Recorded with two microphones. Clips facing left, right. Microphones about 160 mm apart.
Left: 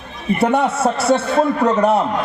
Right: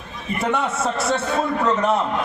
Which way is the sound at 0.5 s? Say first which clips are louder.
Left 6 dB; 35° left (ahead or behind).